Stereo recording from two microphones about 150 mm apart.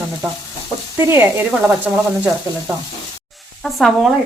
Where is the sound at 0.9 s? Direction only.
20° right (ahead or behind).